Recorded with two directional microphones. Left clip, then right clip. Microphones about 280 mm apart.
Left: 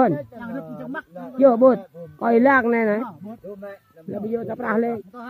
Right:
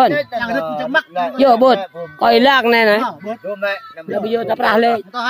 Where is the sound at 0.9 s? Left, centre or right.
Centre.